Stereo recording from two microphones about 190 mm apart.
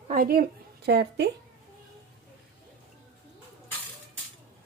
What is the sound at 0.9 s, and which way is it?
Speech, 60° right (ahead or behind).